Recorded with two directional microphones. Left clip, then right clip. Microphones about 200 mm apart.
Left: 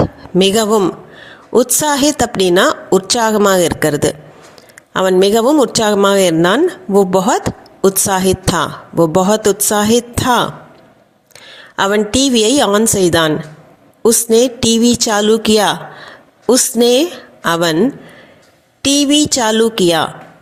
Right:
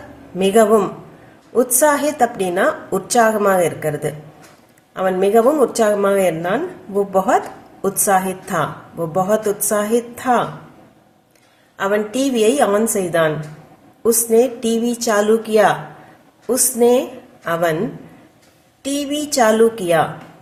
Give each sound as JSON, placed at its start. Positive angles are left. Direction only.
{"t": 0.3, "sound": "a woman's voice", "side_deg": 50}
{"t": 11.8, "sound": "a woman's voice", "side_deg": 45}
{"t": 18.8, "sound": "a woman's voice", "side_deg": 45}